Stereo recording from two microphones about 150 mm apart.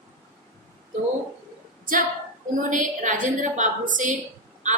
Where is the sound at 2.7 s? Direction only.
60° right (ahead or behind).